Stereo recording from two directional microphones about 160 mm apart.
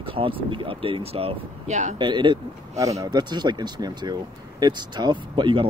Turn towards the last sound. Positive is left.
turn(degrees=-30)  # may be behind; listen again after turning